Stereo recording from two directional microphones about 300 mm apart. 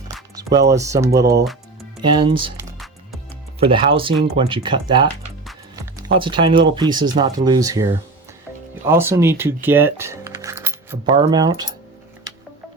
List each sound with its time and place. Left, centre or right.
0.3 s speech: centre
2.7 s music: centre
3.6 s speech: centre
5.7 s music: centre
6.7 s speech: centre